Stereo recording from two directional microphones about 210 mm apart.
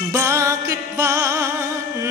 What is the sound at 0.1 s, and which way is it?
Music, 15° right (ahead or behind).